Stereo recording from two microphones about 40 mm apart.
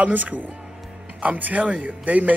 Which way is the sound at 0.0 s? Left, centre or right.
Right.